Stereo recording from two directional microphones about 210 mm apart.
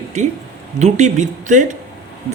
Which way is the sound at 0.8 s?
35° right (ahead or behind).